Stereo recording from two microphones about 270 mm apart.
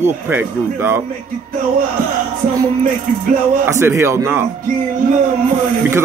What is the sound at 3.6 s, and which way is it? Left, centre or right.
Speech, centre.